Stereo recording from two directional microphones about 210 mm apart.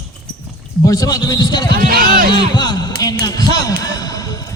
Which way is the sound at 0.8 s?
15° left (ahead or behind).